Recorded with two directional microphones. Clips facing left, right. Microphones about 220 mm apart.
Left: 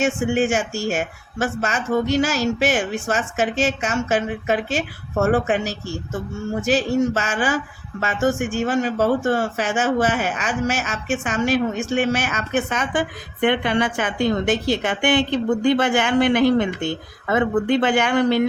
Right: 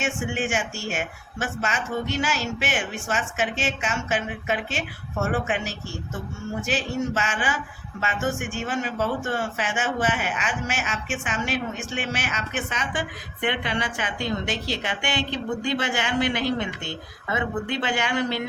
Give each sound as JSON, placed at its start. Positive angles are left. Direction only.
{"t": 0.0, "sound": "speech", "side_deg": 40}